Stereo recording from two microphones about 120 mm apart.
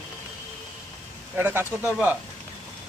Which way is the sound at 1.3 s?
15° right (ahead or behind).